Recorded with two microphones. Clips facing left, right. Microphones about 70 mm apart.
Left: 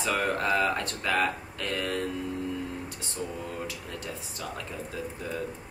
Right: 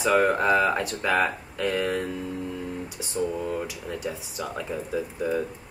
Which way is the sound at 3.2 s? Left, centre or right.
Centre.